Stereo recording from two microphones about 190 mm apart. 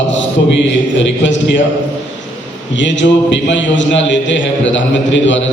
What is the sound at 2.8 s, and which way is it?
A man's voice, 75° left (ahead or behind).